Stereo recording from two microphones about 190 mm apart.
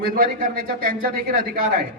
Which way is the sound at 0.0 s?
50° right (ahead or behind).